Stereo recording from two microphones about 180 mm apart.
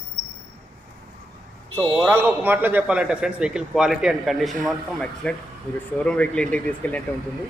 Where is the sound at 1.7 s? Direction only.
10° left (ahead or behind).